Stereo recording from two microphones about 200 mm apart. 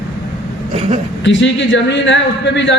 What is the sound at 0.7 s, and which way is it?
Speech, 30° right (ahead or behind).